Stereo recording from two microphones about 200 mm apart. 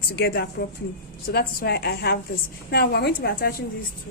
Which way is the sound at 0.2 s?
50° left (ahead or behind).